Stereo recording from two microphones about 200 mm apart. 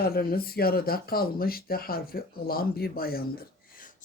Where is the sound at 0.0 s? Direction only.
50° left (ahead or behind).